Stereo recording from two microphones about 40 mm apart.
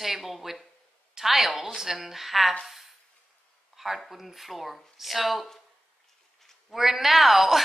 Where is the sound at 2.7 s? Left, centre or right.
Centre.